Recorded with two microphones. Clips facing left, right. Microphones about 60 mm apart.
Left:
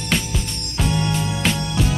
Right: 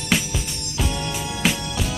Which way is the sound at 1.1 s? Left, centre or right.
Centre.